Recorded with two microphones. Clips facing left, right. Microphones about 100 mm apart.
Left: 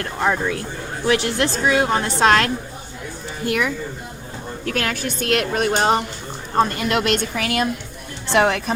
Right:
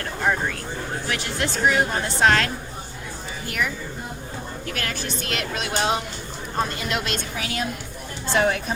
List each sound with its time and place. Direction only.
1.0 s a woman's voice: 80° left
3.4 s a woman's voice: 60° left (ahead or behind)